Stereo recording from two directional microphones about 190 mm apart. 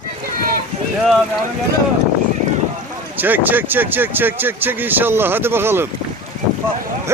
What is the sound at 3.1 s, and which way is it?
Speech, 10° right (ahead or behind).